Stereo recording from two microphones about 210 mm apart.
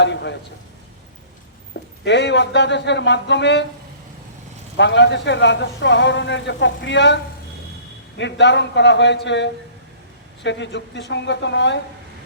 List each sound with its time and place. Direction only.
0.0 s speech: 55° left (ahead or behind)
2.0 s speech: 55° left (ahead or behind)
4.8 s speech: 55° left (ahead or behind)
8.2 s speech: 55° left (ahead or behind)